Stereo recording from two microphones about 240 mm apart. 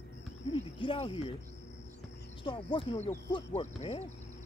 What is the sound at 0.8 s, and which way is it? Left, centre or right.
Speech, left.